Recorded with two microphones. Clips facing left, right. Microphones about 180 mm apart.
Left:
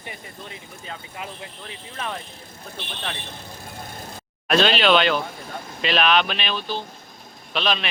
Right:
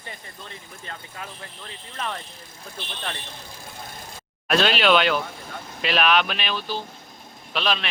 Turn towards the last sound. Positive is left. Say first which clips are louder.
# left 1 dB
turn(degrees=0)  # may be behind; listen again after turning